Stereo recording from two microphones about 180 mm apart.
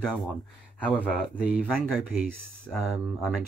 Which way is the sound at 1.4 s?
5° right (ahead or behind).